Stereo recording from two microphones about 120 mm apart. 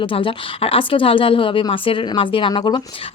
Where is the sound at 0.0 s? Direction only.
45° left (ahead or behind).